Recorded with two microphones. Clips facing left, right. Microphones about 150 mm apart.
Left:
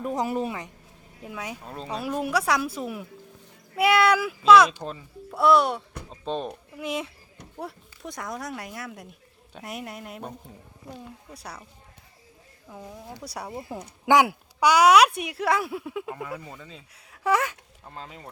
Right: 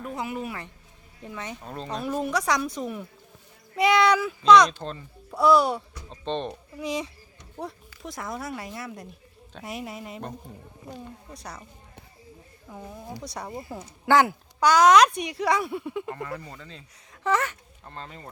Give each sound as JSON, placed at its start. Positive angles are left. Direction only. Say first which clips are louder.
{"t": 0.0, "sound": "speech", "louder": "left 5 dB", "side_deg": 40}
{"t": 0.4, "sound": "speech", "louder": "left 3 dB", "side_deg": 20}
{"t": 12.7, "sound": "speech", "louder": "right 2 dB", "side_deg": 0}